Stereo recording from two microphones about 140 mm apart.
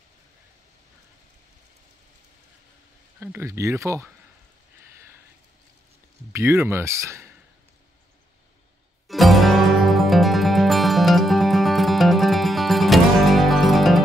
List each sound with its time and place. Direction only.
3.2 s speech: 15° right (ahead or behind)
6.3 s speech: 20° right (ahead or behind)
9.0 s music: centre (ahead or behind)